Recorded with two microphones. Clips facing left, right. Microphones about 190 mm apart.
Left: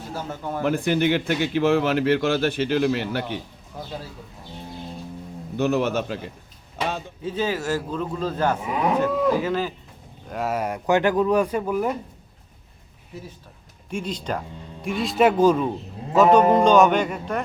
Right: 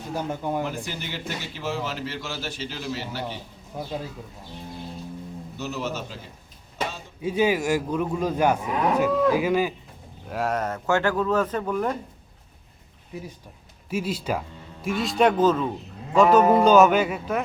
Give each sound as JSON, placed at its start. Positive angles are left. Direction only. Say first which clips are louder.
{"t": 0.1, "sound": "a man's voice", "louder": "right 3 dB", "side_deg": -15}
{"t": 0.6, "sound": "a man's voice", "louder": "left 10 dB", "side_deg": 60}
{"t": 5.5, "sound": "a man's voice", "louder": "left 9 dB", "side_deg": 60}
{"t": 7.2, "sound": "a man's voice", "louder": "right 5 dB", "side_deg": -10}
{"t": 8.6, "sound": "speech", "louder": "left 1 dB", "side_deg": 10}
{"t": 9.3, "sound": "a man's voice", "louder": "right 1 dB", "side_deg": -10}
{"t": 10.2, "sound": "speech", "louder": "even", "side_deg": 0}
{"t": 13.9, "sound": "speech", "louder": "right 1 dB", "side_deg": -5}
{"t": 16.1, "sound": "speech", "louder": "left 1 dB", "side_deg": 0}